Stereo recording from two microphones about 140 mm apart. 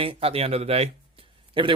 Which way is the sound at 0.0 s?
45° right (ahead or behind).